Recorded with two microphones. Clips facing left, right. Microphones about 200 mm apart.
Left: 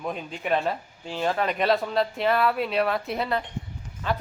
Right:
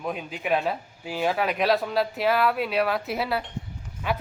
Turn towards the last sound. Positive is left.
turn(degrees=-10)  # may be behind; listen again after turning